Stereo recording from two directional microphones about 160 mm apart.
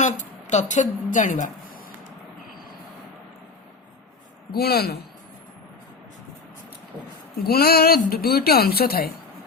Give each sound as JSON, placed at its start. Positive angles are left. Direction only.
{"t": 0.0, "sound": "a woman's voice", "side_deg": 50}
{"t": 4.5, "sound": "a woman's voice", "side_deg": 75}
{"t": 7.4, "sound": "a woman's voice", "side_deg": 75}